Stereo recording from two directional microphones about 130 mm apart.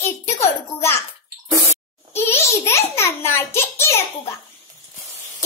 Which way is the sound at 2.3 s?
20° left (ahead or behind).